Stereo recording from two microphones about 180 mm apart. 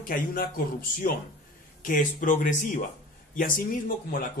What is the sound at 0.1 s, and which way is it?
Speech, 50° left (ahead or behind).